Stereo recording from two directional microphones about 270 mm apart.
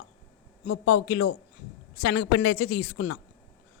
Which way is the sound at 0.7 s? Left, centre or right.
Left.